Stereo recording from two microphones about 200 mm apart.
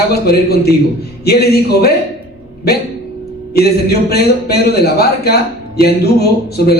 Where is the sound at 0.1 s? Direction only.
55° left (ahead or behind).